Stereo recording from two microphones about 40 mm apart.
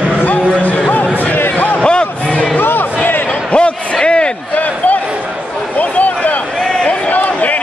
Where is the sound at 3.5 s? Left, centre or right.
Left.